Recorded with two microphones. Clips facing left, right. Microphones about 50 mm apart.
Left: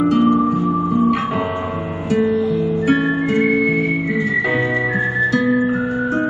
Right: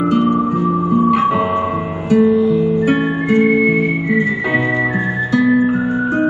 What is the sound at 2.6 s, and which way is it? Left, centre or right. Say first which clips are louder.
Music: right 2 dB; right.